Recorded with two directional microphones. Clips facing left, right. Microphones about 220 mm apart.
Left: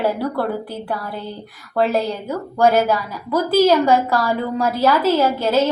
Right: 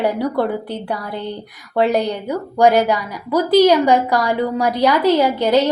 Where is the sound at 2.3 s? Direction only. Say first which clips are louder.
Right 3 dB; 15° right (ahead or behind).